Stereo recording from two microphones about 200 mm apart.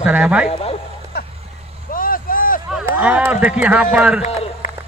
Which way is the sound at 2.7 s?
5° right (ahead or behind).